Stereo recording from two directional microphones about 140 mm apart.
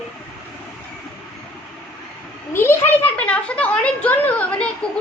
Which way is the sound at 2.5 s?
15° left (ahead or behind).